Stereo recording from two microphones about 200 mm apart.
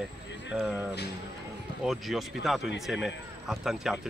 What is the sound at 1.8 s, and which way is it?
Speech, centre (ahead or behind).